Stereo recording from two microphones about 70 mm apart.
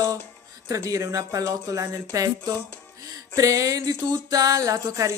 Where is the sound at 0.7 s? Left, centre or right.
Right.